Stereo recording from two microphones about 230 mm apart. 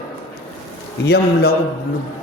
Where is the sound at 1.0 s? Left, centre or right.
Left.